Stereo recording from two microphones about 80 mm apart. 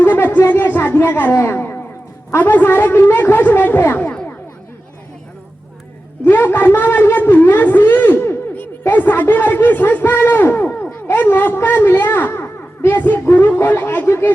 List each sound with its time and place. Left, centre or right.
0.0 s a sound: left
2.4 s a woman's voice: left
6.2 s a woman's voice: left